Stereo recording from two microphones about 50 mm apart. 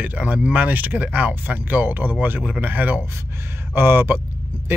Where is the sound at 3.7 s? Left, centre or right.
Right.